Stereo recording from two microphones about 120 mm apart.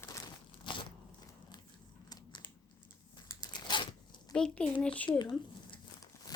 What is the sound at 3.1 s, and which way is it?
Tearing, 35° left (ahead or behind).